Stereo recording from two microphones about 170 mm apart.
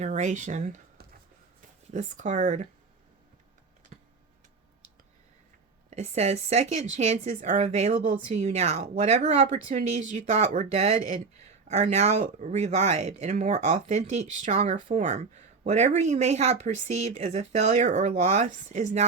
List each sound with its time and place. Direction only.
0.0 s speech: 45° right (ahead or behind)
1.9 s speech: 45° right (ahead or behind)
3.9 s tick-tock: 50° right (ahead or behind)
5.9 s speech: 40° right (ahead or behind)